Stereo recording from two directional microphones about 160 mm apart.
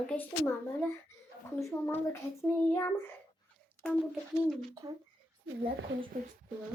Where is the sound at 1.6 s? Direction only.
15° left (ahead or behind).